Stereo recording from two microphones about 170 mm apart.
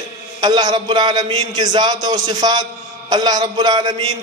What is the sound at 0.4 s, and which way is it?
A man's voice, 25° right (ahead or behind).